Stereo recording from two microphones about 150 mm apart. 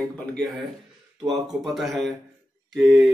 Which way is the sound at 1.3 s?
Centre (ahead or behind).